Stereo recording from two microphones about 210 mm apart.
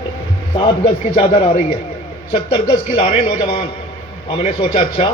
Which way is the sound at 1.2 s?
25° left (ahead or behind).